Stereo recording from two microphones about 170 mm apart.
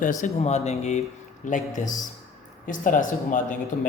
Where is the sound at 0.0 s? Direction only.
50° left (ahead or behind).